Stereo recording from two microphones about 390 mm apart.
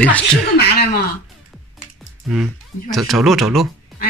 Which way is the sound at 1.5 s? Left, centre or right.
Centre.